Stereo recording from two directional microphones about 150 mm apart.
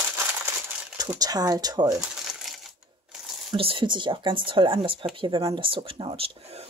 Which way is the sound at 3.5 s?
35° right (ahead or behind).